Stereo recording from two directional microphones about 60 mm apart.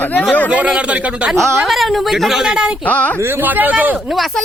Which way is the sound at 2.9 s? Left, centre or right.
Left.